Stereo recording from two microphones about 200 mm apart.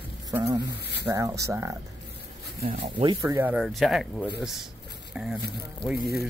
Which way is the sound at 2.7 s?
25° right (ahead or behind).